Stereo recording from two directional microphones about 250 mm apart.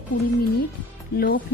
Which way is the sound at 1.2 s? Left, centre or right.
Left.